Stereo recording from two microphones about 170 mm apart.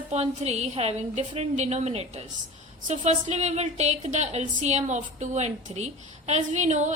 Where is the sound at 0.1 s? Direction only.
40° right (ahead or behind).